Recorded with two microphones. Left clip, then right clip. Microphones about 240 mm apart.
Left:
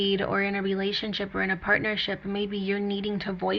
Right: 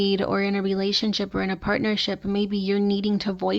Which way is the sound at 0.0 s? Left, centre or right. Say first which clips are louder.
Right 2 dB; right.